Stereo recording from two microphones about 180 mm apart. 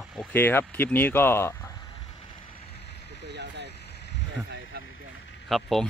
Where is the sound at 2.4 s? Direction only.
35° left (ahead or behind).